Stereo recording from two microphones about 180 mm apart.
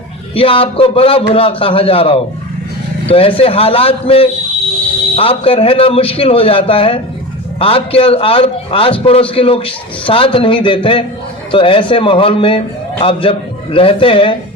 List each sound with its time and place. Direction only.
0.3 s a man's voice: 30° left (ahead or behind)